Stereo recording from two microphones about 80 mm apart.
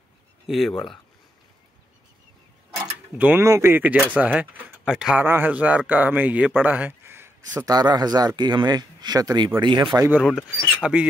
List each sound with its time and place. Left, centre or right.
0.5 s speech: centre
2.7 s mechanisms: right
3.4 s speech: right
3.7 s speech: right
4.8 s speech: centre
5.1 s speech: right
6.6 s a sound: right
7.6 s speech: right
9.6 s speech: right
10.5 s speech: centre